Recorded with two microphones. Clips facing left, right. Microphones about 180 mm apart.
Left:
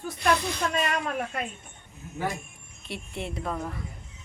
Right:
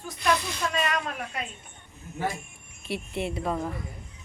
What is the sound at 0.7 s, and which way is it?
Speech, 45° left (ahead or behind).